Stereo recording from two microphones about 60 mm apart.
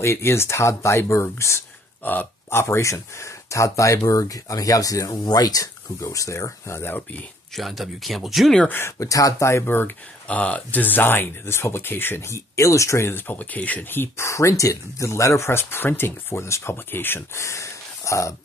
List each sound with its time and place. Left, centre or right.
0.0 s speech: left
2.0 s speech: left
2.5 s speech: left
6.0 s speech: left
7.5 s speech: centre
8.8 s speech: left
9.5 s speech: left
10.2 s speech: left
12.2 s speech: left
13.1 s speech: left
13.8 s speech: left
14.2 s speech: left
17.4 s speech: left